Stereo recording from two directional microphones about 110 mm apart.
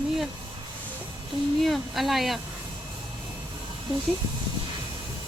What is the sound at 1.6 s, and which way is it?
Speech, centre (ahead or behind).